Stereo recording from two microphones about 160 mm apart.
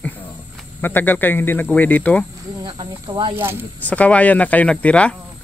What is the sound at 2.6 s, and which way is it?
Speech, 30° right (ahead or behind).